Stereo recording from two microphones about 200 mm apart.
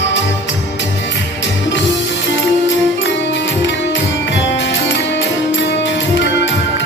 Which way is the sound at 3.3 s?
65° left (ahead or behind).